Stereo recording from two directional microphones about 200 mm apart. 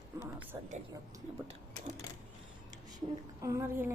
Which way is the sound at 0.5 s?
20° right (ahead or behind).